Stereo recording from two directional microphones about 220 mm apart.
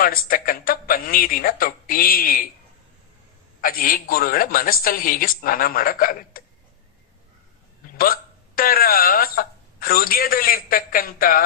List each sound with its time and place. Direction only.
0.0 s a woman's voice: 40° left (ahead or behind)
3.6 s a woman's voice: 40° left (ahead or behind)
7.9 s speech: 40° left (ahead or behind)